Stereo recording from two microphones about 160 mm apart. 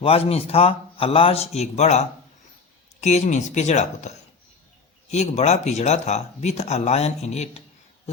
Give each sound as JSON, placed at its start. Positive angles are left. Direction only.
{"t": 0.0, "sound": "a man's voice", "side_deg": 35}
{"t": 5.1, "sound": "speech", "side_deg": 45}